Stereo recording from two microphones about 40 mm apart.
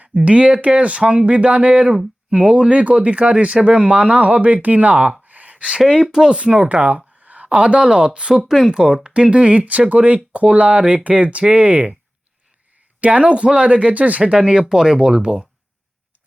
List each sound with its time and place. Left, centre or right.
0.0 s speech: right
5.2 s a sound: right
5.9 s speech: centre
6.4 s speech: right
7.8 s speech: centre
8.4 s speech: centre
8.7 s speech: right
13.0 s speech: right